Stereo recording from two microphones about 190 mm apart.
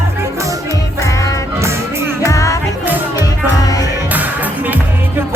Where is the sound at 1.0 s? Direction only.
15° left (ahead or behind).